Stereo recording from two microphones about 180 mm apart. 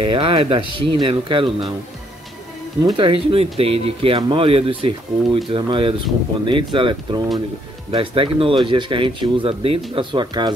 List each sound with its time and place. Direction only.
0.1 s speech: 30° right (ahead or behind)
2.8 s speech: 25° right (ahead or behind)